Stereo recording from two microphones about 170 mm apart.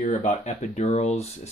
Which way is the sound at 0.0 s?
40° left (ahead or behind).